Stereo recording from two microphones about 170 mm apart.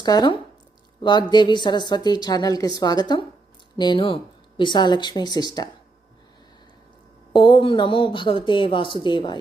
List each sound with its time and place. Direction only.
0.0 s a woman's voice: 25° left (ahead or behind)
7.3 s a woman's voice: 30° left (ahead or behind)